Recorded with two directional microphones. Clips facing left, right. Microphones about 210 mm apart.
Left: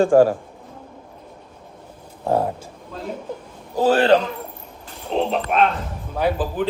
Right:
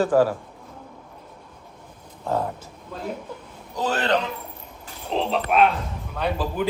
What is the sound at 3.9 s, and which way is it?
Speech, 30° left (ahead or behind).